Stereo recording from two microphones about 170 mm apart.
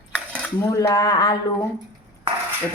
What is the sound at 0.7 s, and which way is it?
Speech, 20° left (ahead or behind).